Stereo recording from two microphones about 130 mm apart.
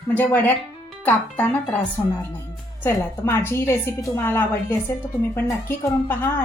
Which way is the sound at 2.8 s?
15° left (ahead or behind).